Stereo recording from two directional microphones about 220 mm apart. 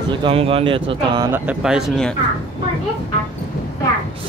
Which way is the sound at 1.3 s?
5° right (ahead or behind).